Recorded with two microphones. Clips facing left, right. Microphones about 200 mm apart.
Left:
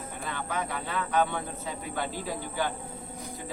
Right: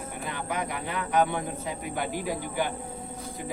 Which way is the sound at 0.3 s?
15° right (ahead or behind).